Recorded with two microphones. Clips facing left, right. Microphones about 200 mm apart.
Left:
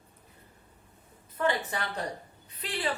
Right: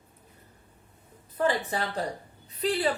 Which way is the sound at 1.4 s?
35° right (ahead or behind).